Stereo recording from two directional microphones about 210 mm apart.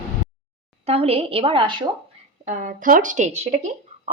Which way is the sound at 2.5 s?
40° right (ahead or behind).